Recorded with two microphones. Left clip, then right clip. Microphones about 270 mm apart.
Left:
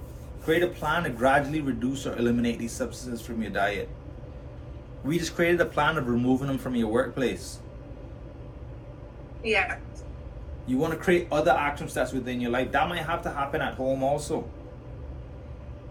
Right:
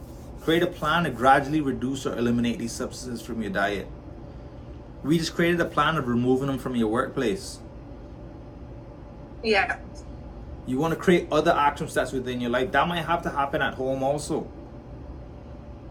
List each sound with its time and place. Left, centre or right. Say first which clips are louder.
0.4 s speech: right 1 dB; centre
5.0 s speech: right 1 dB; centre
9.4 s speech: right 3 dB; right
10.7 s speech: right 2 dB; centre